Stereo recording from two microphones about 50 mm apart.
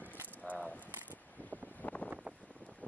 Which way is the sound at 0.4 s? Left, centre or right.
Left.